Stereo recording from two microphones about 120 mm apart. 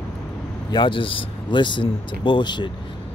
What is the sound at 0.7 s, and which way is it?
Speech, 40° left (ahead or behind).